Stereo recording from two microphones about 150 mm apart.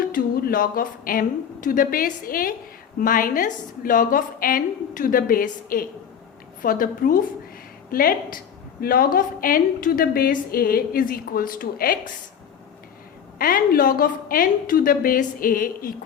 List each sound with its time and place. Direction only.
0.0 s a woman's voice: 75° left (ahead or behind)
13.4 s a woman's voice: 70° left (ahead or behind)